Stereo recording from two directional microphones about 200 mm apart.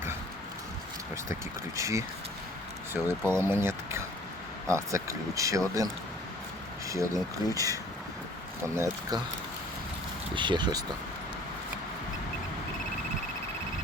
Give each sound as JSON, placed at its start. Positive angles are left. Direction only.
{"t": 1.1, "sound": "speech", "side_deg": -15}
{"t": 10.3, "sound": "speech", "side_deg": -25}